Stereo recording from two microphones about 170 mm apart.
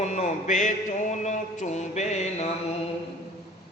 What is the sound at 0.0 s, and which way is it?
A man's voice, 45° left (ahead or behind).